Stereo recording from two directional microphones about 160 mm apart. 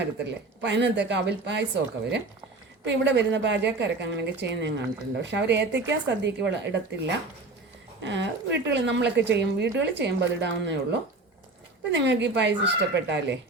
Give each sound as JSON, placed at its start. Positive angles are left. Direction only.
{"t": 0.6, "sound": "speech", "side_deg": -90}
{"t": 11.9, "sound": "speech", "side_deg": -90}